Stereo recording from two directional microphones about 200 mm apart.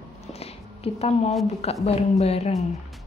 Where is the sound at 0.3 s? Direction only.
30° left (ahead or behind).